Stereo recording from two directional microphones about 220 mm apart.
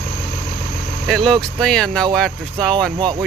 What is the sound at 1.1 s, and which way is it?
Speech, centre (ahead or behind).